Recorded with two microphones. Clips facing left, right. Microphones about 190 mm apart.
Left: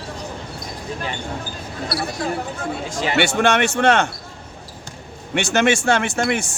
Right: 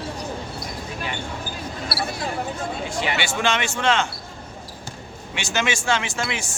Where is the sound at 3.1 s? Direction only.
65° left (ahead or behind).